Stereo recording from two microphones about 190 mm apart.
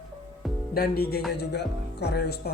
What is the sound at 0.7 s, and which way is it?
Speech, 55° left (ahead or behind).